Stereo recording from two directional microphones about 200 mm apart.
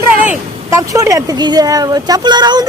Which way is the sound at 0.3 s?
15° right (ahead or behind).